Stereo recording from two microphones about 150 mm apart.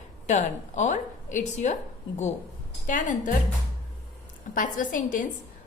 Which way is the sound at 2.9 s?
60° left (ahead or behind).